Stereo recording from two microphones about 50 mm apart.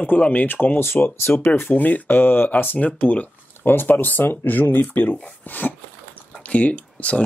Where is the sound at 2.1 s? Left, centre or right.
Left.